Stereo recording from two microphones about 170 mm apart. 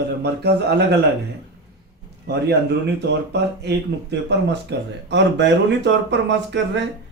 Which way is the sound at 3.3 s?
80° right.